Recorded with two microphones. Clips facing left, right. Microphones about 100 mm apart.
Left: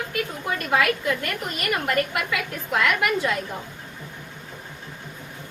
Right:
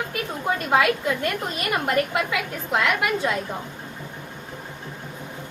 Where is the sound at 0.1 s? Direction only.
25° right (ahead or behind).